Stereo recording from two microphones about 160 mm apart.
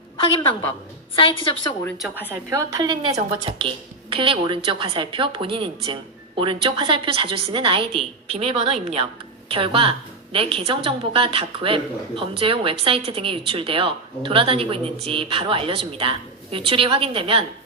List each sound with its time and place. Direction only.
0.2 s a woman's voice: 35° left (ahead or behind)
2.5 s a woman's voice: 20° right (ahead or behind)